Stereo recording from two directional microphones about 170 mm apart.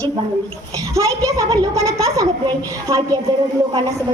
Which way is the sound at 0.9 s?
20° right (ahead or behind).